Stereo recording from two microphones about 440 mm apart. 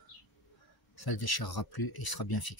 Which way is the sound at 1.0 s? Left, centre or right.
Left.